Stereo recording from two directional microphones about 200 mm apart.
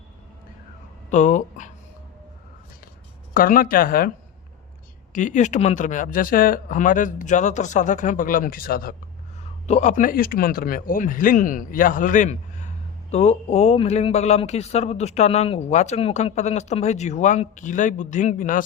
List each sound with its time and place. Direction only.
1.1 s speech: 35° left (ahead or behind)
3.3 s speech: 45° left (ahead or behind)
5.1 s speech: 40° left (ahead or behind)
9.6 s speech: 35° left (ahead or behind)